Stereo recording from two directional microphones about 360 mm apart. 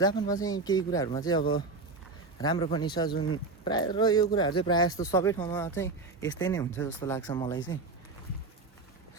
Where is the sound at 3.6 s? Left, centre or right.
Centre.